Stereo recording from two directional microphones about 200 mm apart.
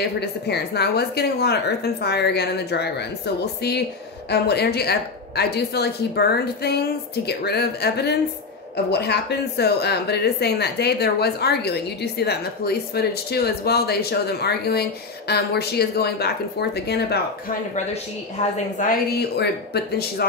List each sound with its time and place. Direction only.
0.2 s a woman's voice: 55° left (ahead or behind)
4.3 s a woman's voice: 55° left (ahead or behind)
18.8 s a woman's voice: 50° left (ahead or behind)